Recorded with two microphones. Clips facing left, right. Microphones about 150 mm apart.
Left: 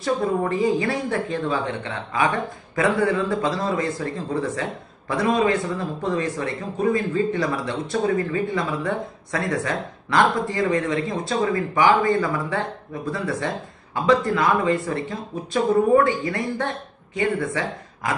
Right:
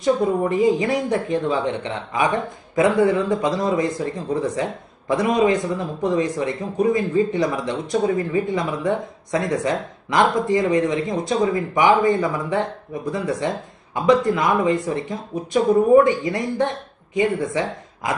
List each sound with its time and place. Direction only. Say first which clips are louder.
0.0 s speech: right 3 dB; 20° right (ahead or behind)